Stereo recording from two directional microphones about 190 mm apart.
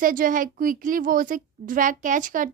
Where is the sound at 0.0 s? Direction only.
45° right (ahead or behind).